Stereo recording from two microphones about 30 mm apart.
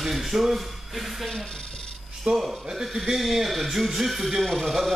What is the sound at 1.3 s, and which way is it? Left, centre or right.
Speech, left.